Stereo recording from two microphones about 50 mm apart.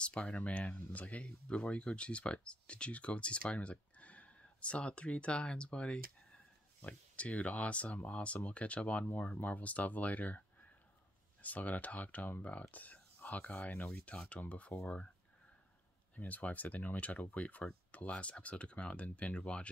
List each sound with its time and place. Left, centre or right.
0.0 s speech: left
11.4 s speech: left
16.2 s speech: left